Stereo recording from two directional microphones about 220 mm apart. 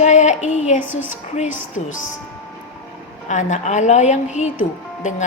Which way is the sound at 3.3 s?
35° left (ahead or behind).